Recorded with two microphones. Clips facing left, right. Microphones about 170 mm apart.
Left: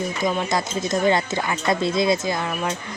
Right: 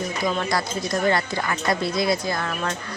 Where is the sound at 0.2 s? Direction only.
20° left (ahead or behind).